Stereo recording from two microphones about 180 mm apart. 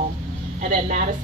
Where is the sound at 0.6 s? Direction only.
45° right (ahead or behind).